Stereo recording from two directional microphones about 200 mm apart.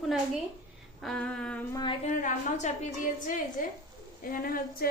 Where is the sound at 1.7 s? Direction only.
20° left (ahead or behind).